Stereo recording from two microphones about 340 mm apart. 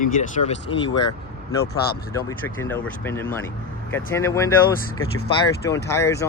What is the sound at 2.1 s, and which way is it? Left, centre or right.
Speech, centre.